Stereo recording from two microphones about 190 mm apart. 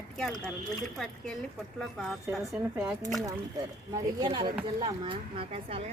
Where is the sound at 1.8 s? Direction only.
Centre (ahead or behind).